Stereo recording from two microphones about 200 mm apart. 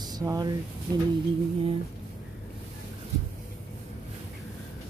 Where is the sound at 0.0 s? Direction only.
20° right (ahead or behind).